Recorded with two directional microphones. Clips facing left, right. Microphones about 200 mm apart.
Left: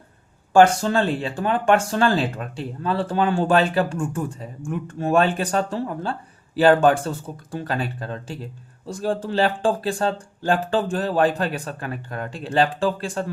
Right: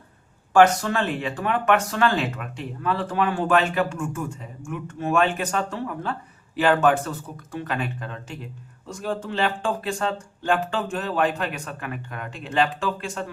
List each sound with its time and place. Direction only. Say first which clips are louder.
0.5 s speech: left 2 dB; 30° left (ahead or behind)